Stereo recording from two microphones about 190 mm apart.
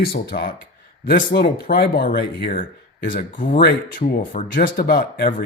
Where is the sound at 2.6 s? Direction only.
45° left (ahead or behind).